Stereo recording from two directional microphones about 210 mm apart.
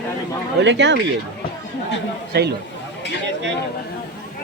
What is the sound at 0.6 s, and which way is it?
Speech, 55° right (ahead or behind).